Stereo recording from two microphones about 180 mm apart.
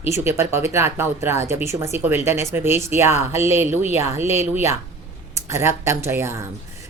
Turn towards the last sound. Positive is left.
turn(degrees=-15)  # may be behind; listen again after turning